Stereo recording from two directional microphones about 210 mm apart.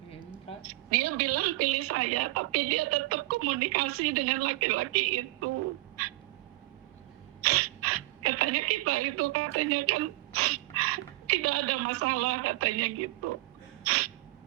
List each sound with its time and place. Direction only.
0.7 s a woman's voice: 90° right
7.4 s speech: 90° right
13.8 s a sound: 90° right